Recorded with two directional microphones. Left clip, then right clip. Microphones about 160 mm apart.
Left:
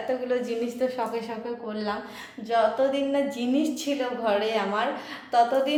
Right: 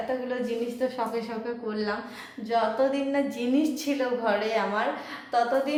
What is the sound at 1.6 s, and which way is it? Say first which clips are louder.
A woman's voice: right 1 dB; 5° left (ahead or behind).